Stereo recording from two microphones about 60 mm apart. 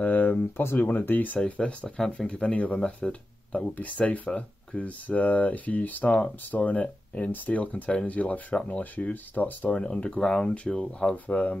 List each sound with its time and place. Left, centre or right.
0.0 s a sound: left
0.7 s speech: left
1.4 s speech: centre